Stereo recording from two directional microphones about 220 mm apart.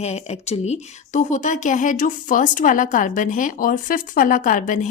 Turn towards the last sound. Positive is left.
turn(degrees=35)  # may be behind; listen again after turning